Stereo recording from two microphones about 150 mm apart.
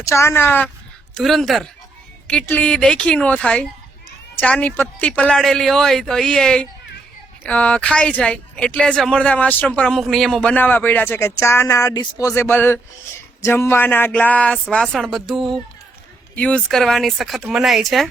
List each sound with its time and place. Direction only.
0.0 s speech: 20° left (ahead or behind)
1.1 s speech: centre (ahead or behind)